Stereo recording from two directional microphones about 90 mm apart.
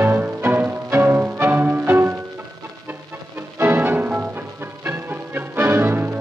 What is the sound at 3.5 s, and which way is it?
Music, 25° right (ahead or behind).